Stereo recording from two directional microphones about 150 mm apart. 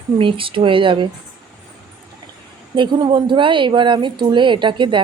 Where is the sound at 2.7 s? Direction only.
30° right (ahead or behind).